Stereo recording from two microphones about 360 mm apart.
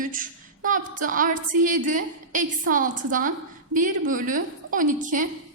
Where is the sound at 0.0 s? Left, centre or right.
Right.